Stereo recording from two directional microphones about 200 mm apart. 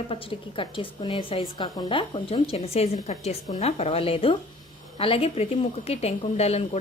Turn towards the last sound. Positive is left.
turn(degrees=30)  # may be behind; listen again after turning